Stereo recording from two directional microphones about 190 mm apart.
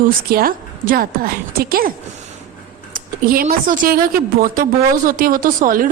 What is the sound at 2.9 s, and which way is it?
A woman's voice, 50° right (ahead or behind).